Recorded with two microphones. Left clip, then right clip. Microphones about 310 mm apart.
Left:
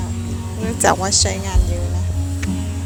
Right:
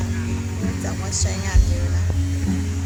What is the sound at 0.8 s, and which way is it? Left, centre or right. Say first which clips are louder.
Speech: left 16 dB; left.